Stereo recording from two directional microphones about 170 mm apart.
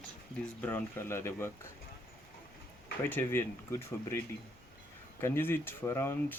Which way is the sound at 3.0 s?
10° left (ahead or behind).